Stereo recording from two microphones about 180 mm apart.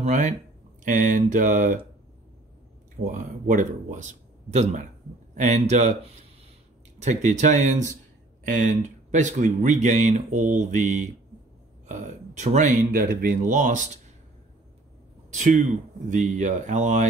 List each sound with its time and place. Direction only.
0.0 s speech: 40° right (ahead or behind)
3.0 s speech: 45° right (ahead or behind)
15.3 s speech: 45° right (ahead or behind)